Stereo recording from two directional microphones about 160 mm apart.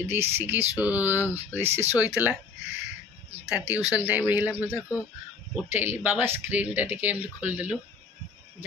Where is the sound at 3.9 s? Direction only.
10° right (ahead or behind).